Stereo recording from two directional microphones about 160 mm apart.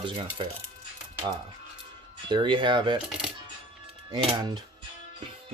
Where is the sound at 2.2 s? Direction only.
30° right (ahead or behind).